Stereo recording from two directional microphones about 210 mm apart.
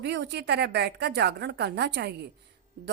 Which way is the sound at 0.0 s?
55° right (ahead or behind).